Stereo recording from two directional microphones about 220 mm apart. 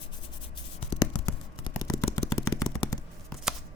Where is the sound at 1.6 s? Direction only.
20° left (ahead or behind).